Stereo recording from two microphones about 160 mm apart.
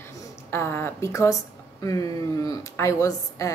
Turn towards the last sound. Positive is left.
turn(degrees=20)  # may be behind; listen again after turning